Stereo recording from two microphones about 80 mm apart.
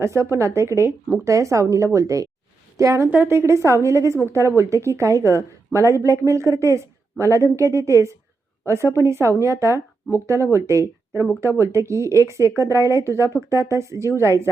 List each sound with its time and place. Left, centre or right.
0.0 s a woman's voice: right
3.1 s a woman's voice: right